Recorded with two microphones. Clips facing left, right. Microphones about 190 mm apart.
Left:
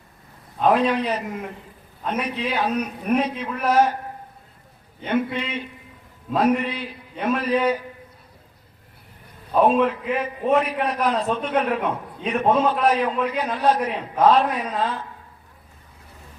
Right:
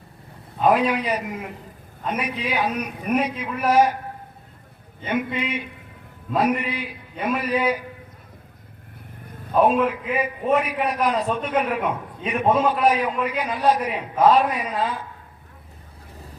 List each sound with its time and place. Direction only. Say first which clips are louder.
0.6 s a man's voice: even; 10° right (ahead or behind)
5.0 s a man's voice: left 1 dB; 10° right (ahead or behind)
9.6 s a man's voice: left 1 dB; 5° right (ahead or behind)